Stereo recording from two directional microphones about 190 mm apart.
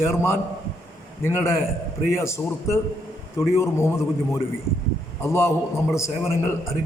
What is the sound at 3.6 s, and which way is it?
Speech, 15° left (ahead or behind).